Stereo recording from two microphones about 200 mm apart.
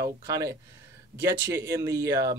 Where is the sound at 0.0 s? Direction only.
15° right (ahead or behind).